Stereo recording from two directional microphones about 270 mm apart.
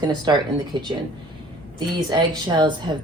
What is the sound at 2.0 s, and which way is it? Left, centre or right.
Speech, centre.